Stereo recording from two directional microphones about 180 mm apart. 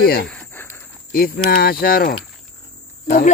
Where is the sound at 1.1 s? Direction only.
55° left (ahead or behind).